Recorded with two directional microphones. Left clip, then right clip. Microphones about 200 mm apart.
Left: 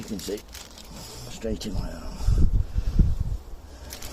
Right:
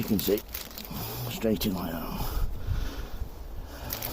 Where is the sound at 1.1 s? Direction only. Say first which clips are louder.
Right 4 dB; 35° right (ahead or behind).